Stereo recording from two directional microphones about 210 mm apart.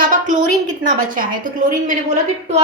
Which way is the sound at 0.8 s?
40° right (ahead or behind).